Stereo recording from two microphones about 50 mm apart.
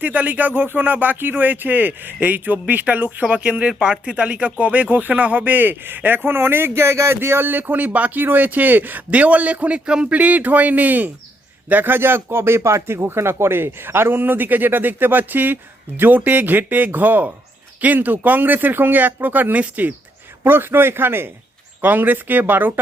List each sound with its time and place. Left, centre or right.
0.0 s speech: right
6.9 s speech: right
7.2 s speech: right
9.0 s speech: right
20.4 s speech: right